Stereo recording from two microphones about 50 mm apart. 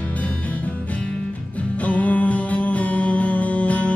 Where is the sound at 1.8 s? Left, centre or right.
Left.